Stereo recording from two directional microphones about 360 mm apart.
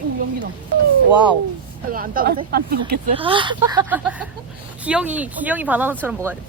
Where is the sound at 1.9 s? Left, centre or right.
Right.